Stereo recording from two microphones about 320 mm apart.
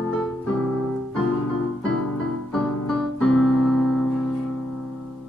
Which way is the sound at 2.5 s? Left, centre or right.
Centre.